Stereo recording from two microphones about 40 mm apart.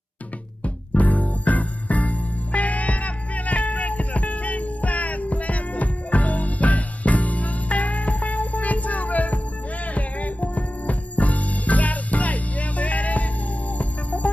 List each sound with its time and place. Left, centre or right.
0.9 s music: left